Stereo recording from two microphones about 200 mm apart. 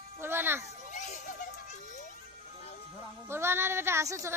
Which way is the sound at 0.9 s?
40° left (ahead or behind).